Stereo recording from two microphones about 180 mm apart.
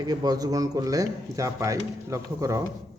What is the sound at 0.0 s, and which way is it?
Speech, 20° right (ahead or behind).